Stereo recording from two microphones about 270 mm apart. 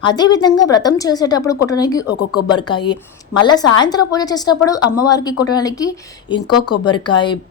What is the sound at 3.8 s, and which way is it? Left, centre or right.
A woman's voice, centre.